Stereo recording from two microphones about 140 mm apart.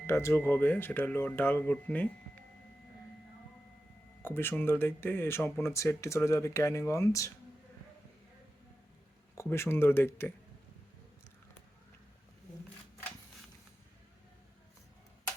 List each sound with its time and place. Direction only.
0.1 s speech: 20° left (ahead or behind)
4.2 s speech: 15° left (ahead or behind)
9.3 s speech: 20° left (ahead or behind)